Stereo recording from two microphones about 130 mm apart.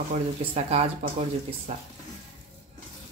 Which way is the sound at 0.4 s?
55° right (ahead or behind).